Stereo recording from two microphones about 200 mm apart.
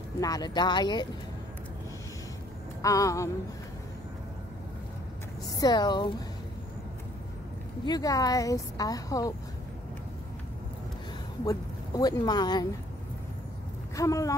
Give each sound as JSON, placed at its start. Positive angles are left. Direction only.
{"t": 0.2, "sound": "speech", "side_deg": 20}
{"t": 2.8, "sound": "a woman's voice", "side_deg": 15}
{"t": 5.6, "sound": "speech", "side_deg": 20}
{"t": 7.8, "sound": "a woman's voice", "side_deg": 20}
{"t": 11.4, "sound": "speech", "side_deg": 20}
{"t": 13.9, "sound": "a woman's voice", "side_deg": 15}